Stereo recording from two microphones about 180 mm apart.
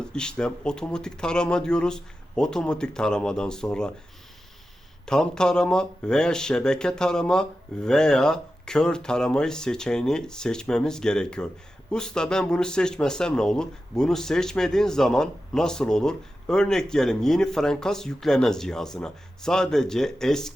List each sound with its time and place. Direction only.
0.0 s speech: 5° left (ahead or behind)
5.0 s speech: 5° left (ahead or behind)